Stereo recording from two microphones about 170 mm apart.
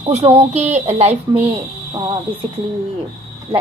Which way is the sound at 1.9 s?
30° right (ahead or behind).